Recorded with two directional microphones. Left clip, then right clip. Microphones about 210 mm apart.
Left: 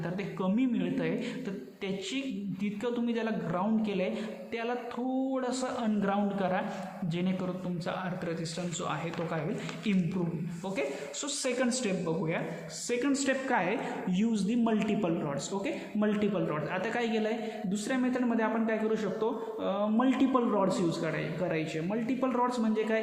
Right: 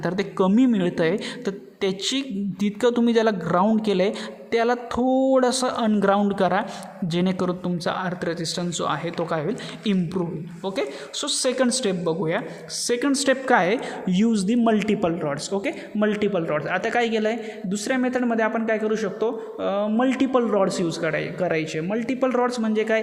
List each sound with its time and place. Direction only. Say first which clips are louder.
0.0 s a man's voice: right 12 dB; 50° right (ahead or behind)